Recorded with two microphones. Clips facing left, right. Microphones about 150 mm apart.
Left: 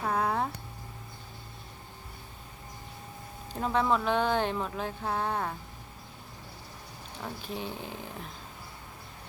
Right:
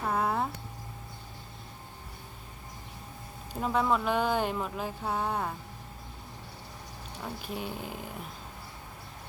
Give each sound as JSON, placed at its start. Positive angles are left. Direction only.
{"t": 0.0, "sound": "a sound", "side_deg": -5}
{"t": 3.5, "sound": "speech", "side_deg": -5}
{"t": 7.4, "sound": "speech", "side_deg": -5}